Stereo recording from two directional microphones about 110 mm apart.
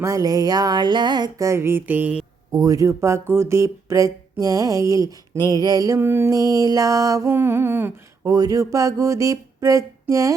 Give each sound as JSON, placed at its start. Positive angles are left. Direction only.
{"t": 0.0, "sound": "a sound", "side_deg": -30}
{"t": 1.4, "sound": "speech", "side_deg": -25}
{"t": 2.5, "sound": "speech", "side_deg": -30}
{"t": 8.3, "sound": "speech", "side_deg": -35}